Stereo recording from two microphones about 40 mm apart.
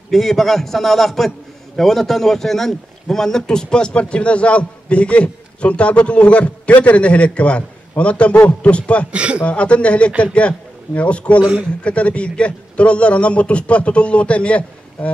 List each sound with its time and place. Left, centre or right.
0.1 s a man's voice: centre; by 9.0 s left
9.1 s speech: right
9.4 s a man's voice: left